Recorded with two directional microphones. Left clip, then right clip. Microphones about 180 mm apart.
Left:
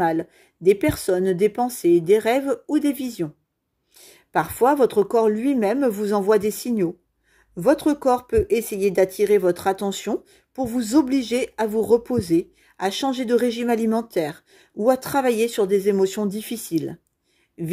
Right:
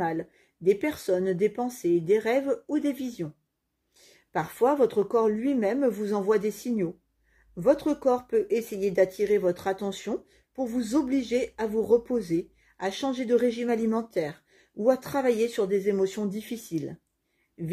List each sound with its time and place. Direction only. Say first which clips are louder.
0.0 s speech: left 8 dB; 45° left (ahead or behind)